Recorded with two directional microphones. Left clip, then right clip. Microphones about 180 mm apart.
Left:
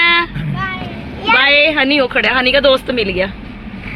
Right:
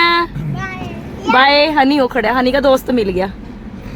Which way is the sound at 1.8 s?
50° right (ahead or behind).